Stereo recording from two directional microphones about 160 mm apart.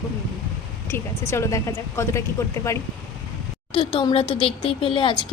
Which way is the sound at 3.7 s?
35° left (ahead or behind).